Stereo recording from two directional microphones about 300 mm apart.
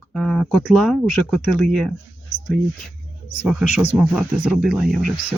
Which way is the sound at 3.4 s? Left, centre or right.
Centre.